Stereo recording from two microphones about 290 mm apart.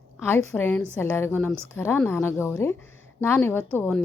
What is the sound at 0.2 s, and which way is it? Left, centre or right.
A woman's voice, centre.